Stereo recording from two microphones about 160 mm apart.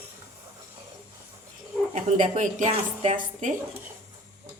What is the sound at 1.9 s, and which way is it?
Speech, 55° right (ahead or behind).